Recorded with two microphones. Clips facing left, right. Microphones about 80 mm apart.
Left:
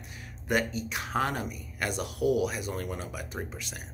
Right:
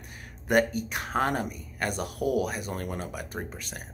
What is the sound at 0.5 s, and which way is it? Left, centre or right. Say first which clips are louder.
Speech: right 5 dB; right.